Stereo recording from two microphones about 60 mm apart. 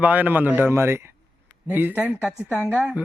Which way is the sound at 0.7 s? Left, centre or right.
Right.